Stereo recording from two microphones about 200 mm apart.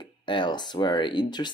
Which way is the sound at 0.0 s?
25° left (ahead or behind).